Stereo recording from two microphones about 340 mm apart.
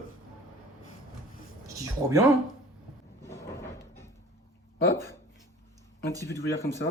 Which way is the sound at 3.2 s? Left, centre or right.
Centre.